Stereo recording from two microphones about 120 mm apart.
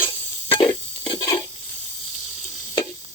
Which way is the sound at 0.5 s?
45° left (ahead or behind).